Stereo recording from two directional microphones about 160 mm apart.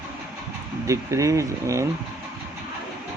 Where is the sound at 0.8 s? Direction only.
20° right (ahead or behind).